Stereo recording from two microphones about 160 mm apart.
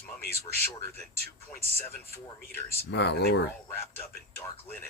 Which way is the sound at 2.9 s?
90° left.